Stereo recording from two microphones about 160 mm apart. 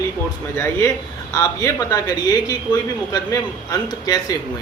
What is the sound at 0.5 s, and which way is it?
Speech, 15° left (ahead or behind).